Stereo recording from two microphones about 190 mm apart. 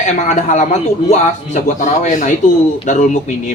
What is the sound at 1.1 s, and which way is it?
Speech, 40° left (ahead or behind).